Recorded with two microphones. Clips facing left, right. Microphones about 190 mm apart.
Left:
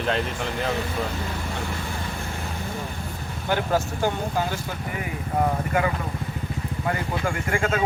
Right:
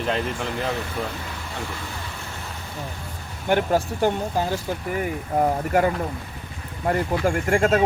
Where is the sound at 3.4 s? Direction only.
25° right (ahead or behind).